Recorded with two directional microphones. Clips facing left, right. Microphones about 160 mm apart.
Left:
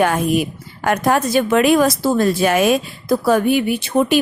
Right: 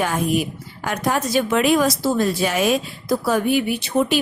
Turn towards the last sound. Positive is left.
turn(degrees=50)  # may be behind; listen again after turning